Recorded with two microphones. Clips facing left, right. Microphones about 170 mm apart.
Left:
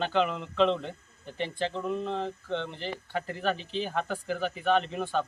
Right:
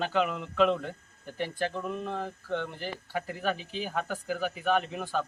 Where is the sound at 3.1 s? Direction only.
5° right (ahead or behind).